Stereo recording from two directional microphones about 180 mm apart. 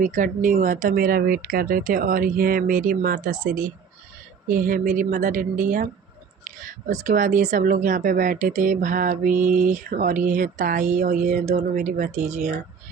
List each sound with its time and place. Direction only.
0.0 s speech: 45° right (ahead or behind)